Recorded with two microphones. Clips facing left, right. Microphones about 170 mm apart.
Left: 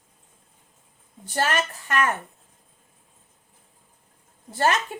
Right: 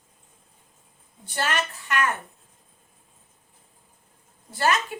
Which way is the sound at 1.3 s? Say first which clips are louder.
Left 3 dB; 45° left (ahead or behind).